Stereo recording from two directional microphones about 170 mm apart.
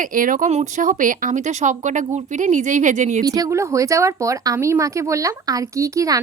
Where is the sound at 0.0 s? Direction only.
50° right (ahead or behind).